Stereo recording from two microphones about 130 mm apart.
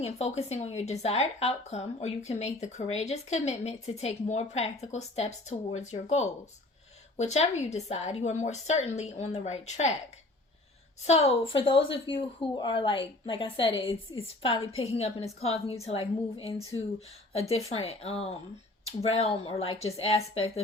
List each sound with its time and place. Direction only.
0.0 s speech: 55° left (ahead or behind)
11.0 s a woman's voice: 55° left (ahead or behind)
17.7 s a woman's voice: 50° left (ahead or behind)